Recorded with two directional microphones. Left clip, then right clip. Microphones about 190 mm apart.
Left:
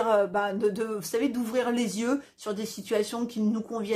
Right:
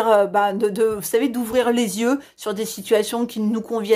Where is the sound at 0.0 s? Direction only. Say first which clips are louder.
Right 8 dB; 45° right (ahead or behind).